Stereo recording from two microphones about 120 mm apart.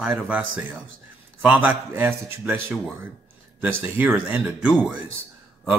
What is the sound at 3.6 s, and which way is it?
Speech, 15° right (ahead or behind).